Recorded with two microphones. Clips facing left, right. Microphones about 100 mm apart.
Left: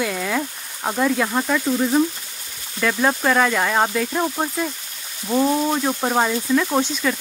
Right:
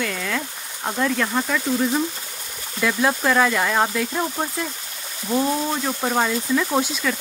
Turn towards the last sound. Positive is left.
turn(degrees=0)  # may be behind; listen again after turning